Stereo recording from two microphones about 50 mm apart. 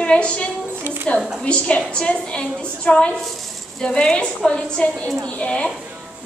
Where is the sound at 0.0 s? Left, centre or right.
Left.